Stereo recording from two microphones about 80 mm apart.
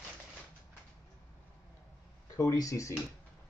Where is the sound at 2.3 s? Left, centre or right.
Left.